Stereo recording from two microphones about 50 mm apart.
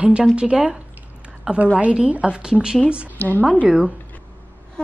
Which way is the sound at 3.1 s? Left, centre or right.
Left.